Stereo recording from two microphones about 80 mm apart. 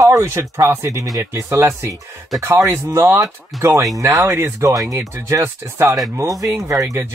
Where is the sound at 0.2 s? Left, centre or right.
Right.